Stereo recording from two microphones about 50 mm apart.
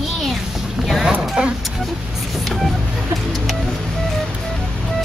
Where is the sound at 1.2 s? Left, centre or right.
Centre.